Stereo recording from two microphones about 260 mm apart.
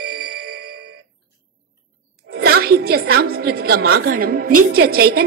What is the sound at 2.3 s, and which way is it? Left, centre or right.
A woman's voice, right.